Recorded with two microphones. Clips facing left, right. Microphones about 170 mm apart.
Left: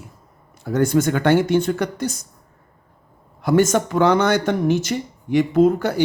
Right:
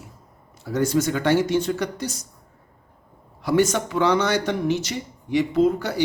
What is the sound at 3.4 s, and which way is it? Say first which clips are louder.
Speech: left 3 dB; 50° left (ahead or behind).